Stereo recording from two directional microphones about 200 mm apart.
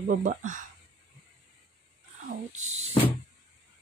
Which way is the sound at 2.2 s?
35° right (ahead or behind).